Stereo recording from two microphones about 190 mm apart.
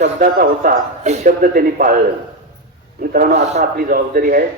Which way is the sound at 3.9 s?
50° right (ahead or behind).